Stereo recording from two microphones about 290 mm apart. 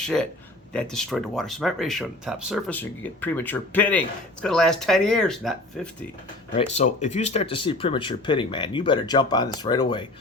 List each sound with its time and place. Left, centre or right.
0.0 s speech: centre
6.6 s speech: left